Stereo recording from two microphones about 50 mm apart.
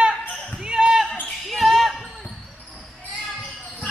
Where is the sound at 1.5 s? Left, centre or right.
Centre.